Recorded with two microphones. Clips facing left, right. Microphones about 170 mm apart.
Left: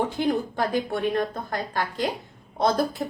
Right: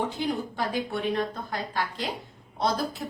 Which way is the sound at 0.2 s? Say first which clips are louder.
Left 5 dB; 50° left (ahead or behind).